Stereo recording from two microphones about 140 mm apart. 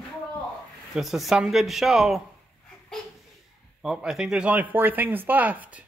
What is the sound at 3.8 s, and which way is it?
Speech, 5° right (ahead or behind).